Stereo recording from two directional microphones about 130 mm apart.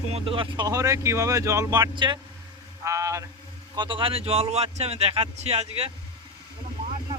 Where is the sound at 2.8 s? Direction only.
20° right (ahead or behind).